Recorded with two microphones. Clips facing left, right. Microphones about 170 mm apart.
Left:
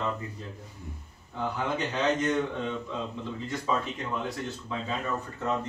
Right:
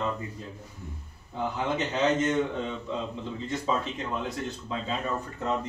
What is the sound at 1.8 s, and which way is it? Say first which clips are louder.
Speech: right 3 dB; 20° right (ahead or behind).